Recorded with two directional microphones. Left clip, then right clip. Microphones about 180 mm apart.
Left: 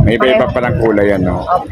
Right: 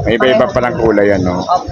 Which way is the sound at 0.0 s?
10° left (ahead or behind).